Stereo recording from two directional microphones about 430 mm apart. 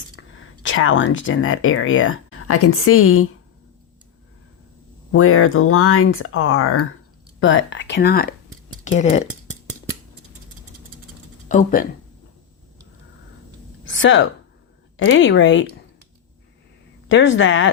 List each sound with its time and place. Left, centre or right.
0.2 s a sound: left
0.6 s speech: left
5.1 s speech: left
11.4 s speech: centre
13.9 s speech: left
17.1 s speech: left